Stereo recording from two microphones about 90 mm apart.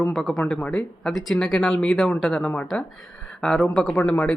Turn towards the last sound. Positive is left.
turn(degrees=20)  # may be behind; listen again after turning